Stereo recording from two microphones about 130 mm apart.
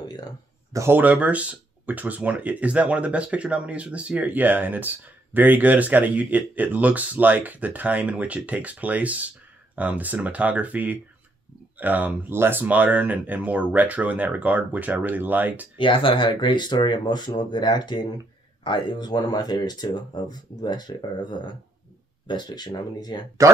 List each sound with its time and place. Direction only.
0.7 s speech: 15° right (ahead or behind)
15.8 s speech: 40° left (ahead or behind)